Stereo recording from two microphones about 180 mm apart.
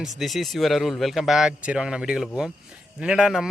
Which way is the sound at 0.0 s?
Centre (ahead or behind).